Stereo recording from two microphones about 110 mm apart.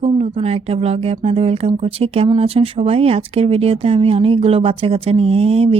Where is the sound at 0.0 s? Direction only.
65° right (ahead or behind).